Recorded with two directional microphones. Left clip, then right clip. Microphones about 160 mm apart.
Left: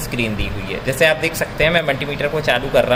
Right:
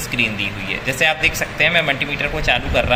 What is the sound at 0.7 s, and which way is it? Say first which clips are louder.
Speech: left 3 dB; 50° left (ahead or behind).